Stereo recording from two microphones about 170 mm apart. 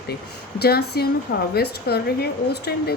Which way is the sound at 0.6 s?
65° left (ahead or behind).